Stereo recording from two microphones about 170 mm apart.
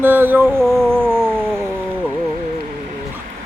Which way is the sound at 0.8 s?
15° right (ahead or behind).